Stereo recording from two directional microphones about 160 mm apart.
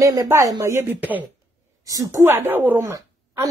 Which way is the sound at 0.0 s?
20° right (ahead or behind).